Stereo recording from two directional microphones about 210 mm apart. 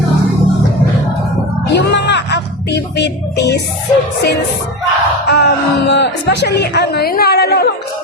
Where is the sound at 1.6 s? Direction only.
55° left (ahead or behind).